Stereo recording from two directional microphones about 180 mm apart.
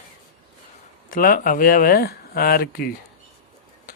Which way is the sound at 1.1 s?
50° left (ahead or behind).